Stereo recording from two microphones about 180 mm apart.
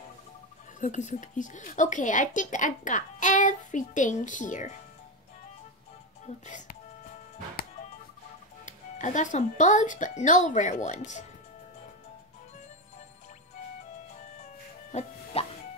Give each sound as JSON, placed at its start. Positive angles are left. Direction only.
{"t": 0.7, "sound": "speech", "side_deg": 45}
{"t": 6.2, "sound": "speech", "side_deg": 45}
{"t": 8.6, "sound": "speech", "side_deg": 40}
{"t": 14.4, "sound": "music", "side_deg": 40}